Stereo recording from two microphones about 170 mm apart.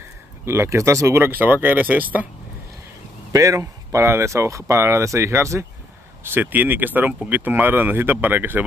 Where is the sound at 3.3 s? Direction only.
20° right (ahead or behind).